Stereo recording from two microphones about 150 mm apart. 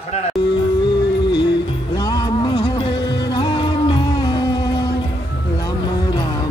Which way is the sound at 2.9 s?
90° left.